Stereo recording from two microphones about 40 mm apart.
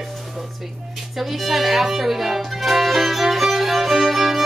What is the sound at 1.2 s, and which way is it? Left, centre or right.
Music, centre.